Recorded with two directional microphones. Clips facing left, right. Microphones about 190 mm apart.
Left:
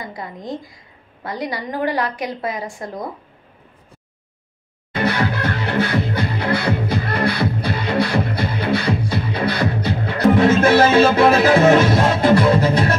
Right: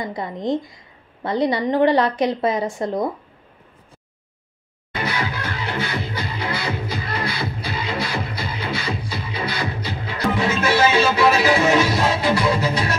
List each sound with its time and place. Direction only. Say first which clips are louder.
0.0 s a woman's voice: right 5 dB; 25° right (ahead or behind)
5.0 s music: left 6 dB; 60° left (ahead or behind)